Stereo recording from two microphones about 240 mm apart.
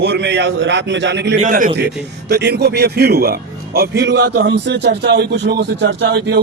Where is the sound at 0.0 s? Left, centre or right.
Right.